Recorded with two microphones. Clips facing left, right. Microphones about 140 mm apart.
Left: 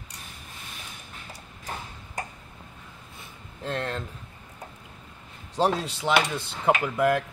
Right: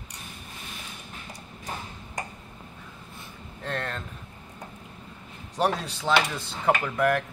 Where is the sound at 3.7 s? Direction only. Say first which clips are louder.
Left 2 dB; 30° left (ahead or behind).